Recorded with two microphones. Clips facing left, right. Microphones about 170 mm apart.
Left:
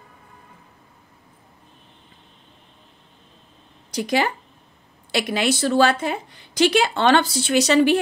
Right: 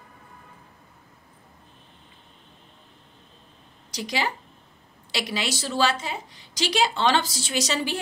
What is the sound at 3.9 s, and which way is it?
Speech, 55° left (ahead or behind).